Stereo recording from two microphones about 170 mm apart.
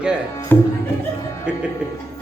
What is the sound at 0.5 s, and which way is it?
Music, 15° left (ahead or behind).